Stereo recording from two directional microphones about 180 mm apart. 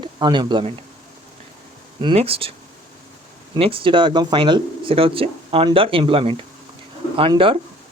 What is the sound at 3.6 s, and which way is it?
Speech, 30° right (ahead or behind).